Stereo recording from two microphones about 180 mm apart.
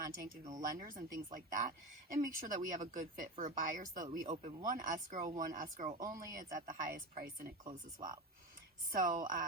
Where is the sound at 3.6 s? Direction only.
50° right (ahead or behind).